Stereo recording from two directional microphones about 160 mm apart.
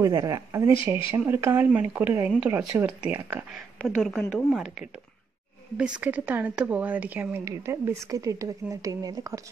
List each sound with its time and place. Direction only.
0.0 s a woman's voice: 20° right (ahead or behind)